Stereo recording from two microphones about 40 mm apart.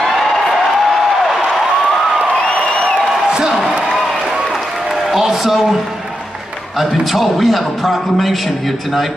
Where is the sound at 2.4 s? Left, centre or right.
Left.